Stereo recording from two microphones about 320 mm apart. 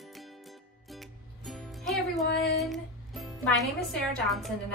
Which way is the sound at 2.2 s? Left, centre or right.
Left.